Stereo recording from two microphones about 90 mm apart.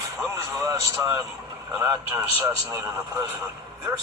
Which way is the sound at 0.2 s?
30° right (ahead or behind).